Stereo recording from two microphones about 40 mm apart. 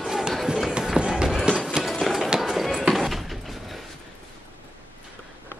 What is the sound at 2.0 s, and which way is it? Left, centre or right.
Run, centre.